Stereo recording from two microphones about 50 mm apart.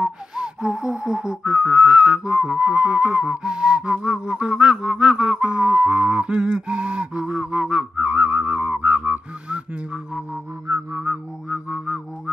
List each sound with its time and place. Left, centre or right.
0.4 s gasp: centre
1.5 s whistling: right
8.0 s whistling: right
11.4 s music: centre